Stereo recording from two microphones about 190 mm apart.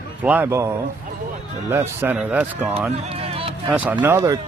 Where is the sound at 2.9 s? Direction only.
35° right (ahead or behind).